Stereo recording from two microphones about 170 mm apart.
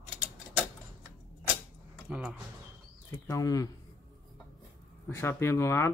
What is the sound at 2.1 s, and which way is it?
Speech, 5° right (ahead or behind).